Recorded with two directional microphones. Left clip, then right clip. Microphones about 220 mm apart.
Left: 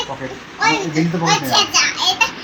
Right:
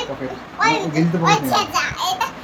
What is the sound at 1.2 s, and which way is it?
A child's voice, 25° right (ahead or behind).